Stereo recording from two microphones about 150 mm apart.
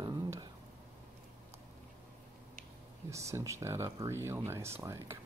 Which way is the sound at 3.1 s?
20° right (ahead or behind).